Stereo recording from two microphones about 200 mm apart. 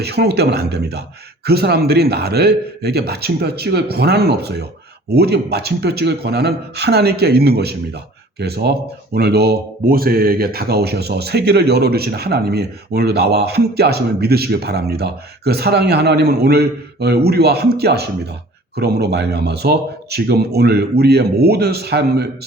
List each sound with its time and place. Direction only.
0.0 s speech: 55° right (ahead or behind)